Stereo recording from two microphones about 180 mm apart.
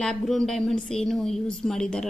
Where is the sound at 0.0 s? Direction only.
Centre (ahead or behind).